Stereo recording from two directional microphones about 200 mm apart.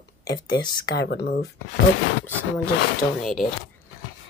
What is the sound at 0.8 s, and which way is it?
Speech, 55° left (ahead or behind).